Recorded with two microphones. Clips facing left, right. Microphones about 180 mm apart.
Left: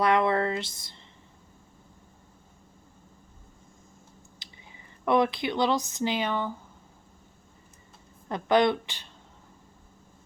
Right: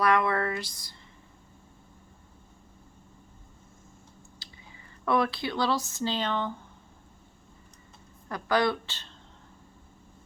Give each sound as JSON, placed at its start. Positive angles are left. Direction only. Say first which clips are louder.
{"t": 0.0, "sound": "speech", "louder": "left 2 dB", "side_deg": 25}
{"t": 4.4, "sound": "speech", "louder": "even", "side_deg": 20}
{"t": 8.3, "sound": "speech", "louder": "left 4 dB", "side_deg": 20}